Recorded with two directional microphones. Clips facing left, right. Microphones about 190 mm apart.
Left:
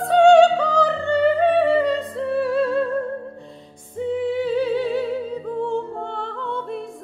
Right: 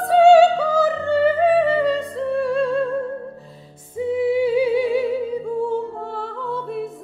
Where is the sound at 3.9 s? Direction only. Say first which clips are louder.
Right 3 dB; 10° right (ahead or behind).